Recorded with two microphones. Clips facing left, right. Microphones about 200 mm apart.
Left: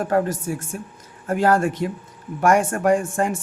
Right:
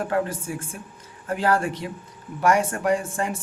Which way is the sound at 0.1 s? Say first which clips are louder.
Left 4 dB; 40° left (ahead or behind).